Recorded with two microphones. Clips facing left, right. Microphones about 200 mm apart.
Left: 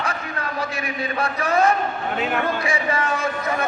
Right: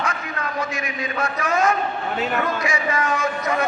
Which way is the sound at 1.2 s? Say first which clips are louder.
Left 1 dB; 30° left (ahead or behind).